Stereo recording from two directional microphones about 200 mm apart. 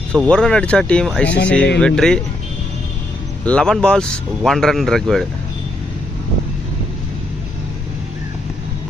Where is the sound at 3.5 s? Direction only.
5° left (ahead or behind).